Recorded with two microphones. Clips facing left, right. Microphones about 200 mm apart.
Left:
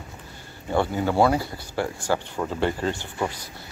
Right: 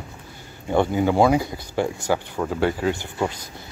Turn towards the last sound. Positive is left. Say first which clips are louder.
# right 3 dB
turn(degrees=-10)  # may be behind; listen again after turning